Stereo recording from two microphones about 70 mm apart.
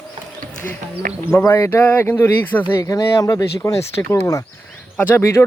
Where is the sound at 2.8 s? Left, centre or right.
Left.